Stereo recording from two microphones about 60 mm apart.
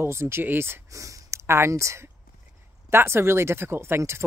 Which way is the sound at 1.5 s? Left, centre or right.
Right.